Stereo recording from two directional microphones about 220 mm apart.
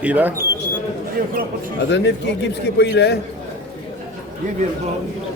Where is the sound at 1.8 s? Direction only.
50° left (ahead or behind).